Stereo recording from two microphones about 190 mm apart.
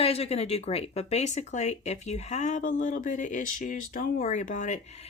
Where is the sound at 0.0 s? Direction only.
30° left (ahead or behind).